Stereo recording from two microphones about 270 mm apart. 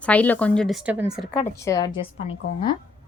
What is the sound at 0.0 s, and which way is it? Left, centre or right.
Speech, centre.